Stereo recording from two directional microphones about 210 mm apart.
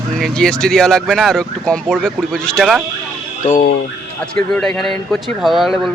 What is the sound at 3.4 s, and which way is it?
Speech, 35° left (ahead or behind).